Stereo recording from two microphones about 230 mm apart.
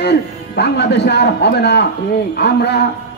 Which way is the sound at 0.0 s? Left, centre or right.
Left.